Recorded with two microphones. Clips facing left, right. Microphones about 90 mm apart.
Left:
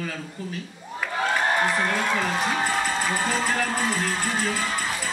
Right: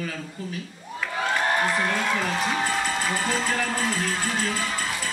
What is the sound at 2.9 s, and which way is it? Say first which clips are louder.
Speech: left 1 dB; 20° left (ahead or behind).